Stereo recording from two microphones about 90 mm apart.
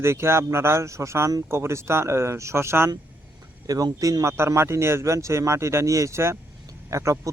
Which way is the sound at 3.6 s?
40° right (ahead or behind).